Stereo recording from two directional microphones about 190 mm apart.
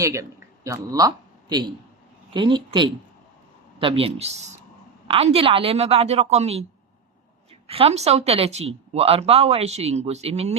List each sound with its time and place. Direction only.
0.0 s a man's voice: 15° right (ahead or behind); by 6.7 s 35° right (ahead or behind)
7.7 s speech: 30° right (ahead or behind)